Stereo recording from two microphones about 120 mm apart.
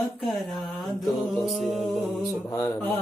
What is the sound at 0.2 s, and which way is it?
Music, centre (ahead or behind).